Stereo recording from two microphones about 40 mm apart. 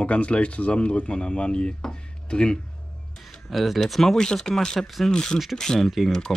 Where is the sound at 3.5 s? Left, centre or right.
Centre.